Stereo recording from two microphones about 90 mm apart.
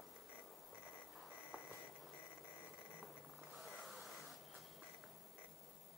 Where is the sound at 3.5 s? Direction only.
Centre (ahead or behind).